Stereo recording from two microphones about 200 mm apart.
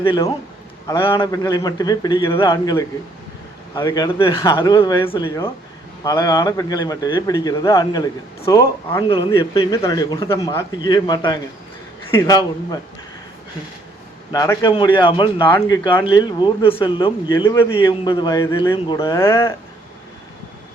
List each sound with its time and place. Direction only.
0.0 s a man's voice: 25° left (ahead or behind)
9.0 s a man's voice: 25° left (ahead or behind)
14.3 s a man's voice: 15° left (ahead or behind)